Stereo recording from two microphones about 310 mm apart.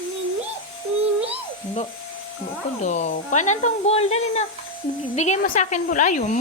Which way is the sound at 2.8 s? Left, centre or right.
Left.